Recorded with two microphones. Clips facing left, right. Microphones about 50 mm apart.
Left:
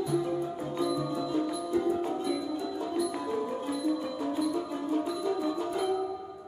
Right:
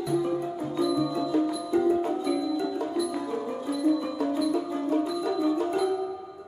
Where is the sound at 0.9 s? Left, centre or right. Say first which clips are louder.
Right 5 dB; right.